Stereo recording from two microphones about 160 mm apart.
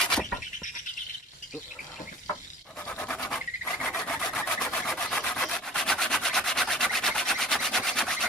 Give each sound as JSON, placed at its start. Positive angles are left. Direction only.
{"t": 2.8, "sound": "rub", "side_deg": 10}